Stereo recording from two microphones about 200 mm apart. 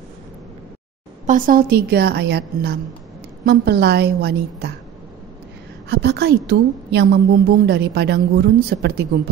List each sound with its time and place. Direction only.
1.2 s a woman's voice: 40° right (ahead or behind)
5.9 s a woman's voice: 55° right (ahead or behind)